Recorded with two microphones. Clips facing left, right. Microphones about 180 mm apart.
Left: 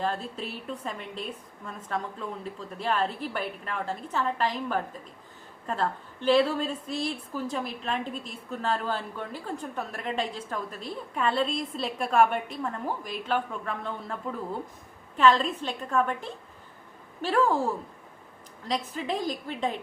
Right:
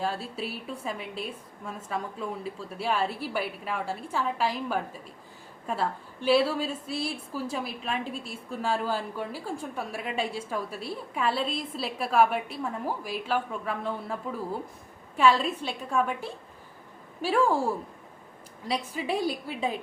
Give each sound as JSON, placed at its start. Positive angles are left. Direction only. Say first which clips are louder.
{"t": 0.0, "sound": "a woman's voice", "louder": "even", "side_deg": -10}